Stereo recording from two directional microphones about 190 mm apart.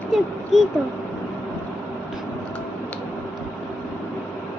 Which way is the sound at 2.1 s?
5° left (ahead or behind).